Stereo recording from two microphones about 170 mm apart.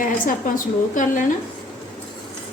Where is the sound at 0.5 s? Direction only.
50° left (ahead or behind).